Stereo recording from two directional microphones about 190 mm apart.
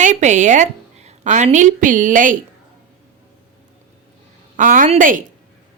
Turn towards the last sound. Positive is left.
turn(degrees=-45)  # may be behind; listen again after turning